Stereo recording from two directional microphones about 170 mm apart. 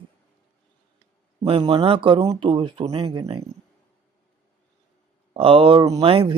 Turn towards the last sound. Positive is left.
turn(degrees=-30)  # may be behind; listen again after turning